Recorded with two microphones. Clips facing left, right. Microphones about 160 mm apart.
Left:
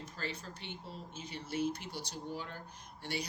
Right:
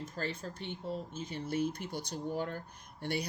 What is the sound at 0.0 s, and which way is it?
Speech, 50° right (ahead or behind).